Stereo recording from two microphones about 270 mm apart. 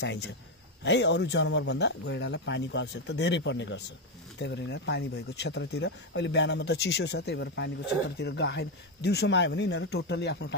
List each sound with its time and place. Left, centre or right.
0.0 s speech: left